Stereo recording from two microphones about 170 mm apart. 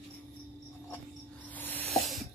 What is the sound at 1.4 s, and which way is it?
Snake, 10° left (ahead or behind).